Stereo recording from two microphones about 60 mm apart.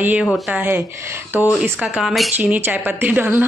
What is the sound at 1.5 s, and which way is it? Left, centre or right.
Speech, centre.